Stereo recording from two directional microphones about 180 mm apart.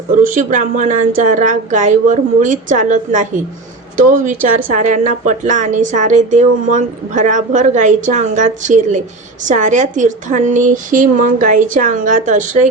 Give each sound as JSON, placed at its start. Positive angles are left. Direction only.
{"t": 0.2, "sound": "speech", "side_deg": -45}